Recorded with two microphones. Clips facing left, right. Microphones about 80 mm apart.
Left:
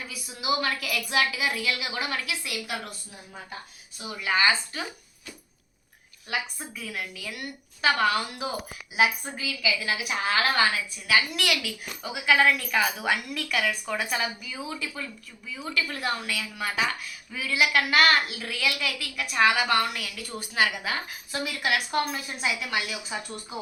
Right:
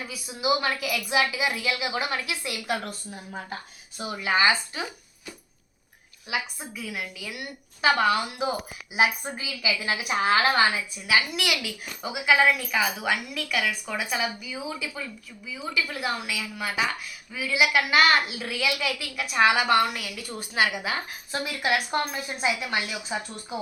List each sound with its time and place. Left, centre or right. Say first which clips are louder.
0.1 s a woman's voice: right 3 dB; right
4.2 s a woman's voice: right 1 dB; right
6.2 s a woman's voice: right 1 dB; centre; by 10.6 s right
11.1 s a woman's voice: even; centre
21.3 s a woman's voice: right 1 dB; right